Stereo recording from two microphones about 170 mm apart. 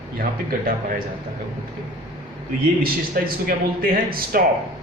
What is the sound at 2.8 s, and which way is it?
A man's voice, 60° right (ahead or behind).